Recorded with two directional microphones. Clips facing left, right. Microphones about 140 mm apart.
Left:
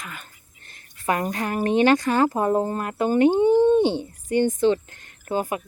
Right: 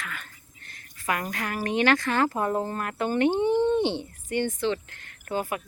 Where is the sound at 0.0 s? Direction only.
15° left (ahead or behind).